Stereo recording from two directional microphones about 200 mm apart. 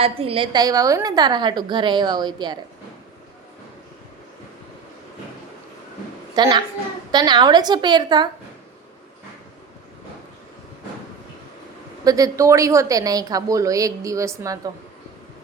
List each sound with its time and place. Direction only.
0.0 s a woman's voice: 30° right (ahead or behind)
6.3 s a woman's voice: 20° right (ahead or behind)
12.0 s a woman's voice: 15° right (ahead or behind)